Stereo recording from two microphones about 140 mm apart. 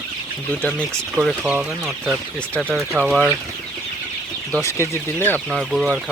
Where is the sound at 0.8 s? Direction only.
5° right (ahead or behind).